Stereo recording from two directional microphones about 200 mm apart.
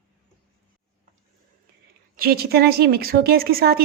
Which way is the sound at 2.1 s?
50° right (ahead or behind).